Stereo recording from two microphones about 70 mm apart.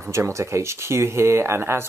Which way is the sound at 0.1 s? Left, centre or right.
Right.